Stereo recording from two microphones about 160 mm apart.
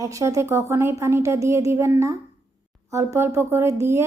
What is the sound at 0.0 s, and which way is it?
Speech, 20° right (ahead or behind).